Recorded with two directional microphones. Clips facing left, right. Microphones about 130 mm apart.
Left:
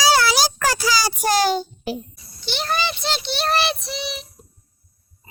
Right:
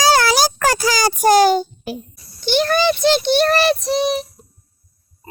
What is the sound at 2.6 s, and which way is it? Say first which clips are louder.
Child singing: right 8 dB; 50° right (ahead or behind).